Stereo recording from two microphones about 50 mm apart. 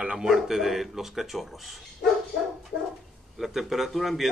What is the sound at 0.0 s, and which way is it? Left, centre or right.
Speech, centre.